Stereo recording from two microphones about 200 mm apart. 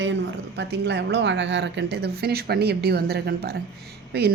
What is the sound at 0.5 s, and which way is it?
Speech, 60° right (ahead or behind).